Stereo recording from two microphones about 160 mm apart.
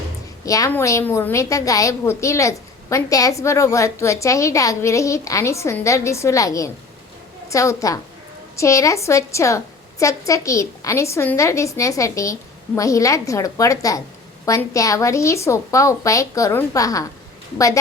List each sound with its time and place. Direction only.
0.4 s a woman's voice: 20° left (ahead or behind)